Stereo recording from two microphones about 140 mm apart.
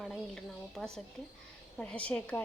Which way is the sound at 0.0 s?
Centre (ahead or behind).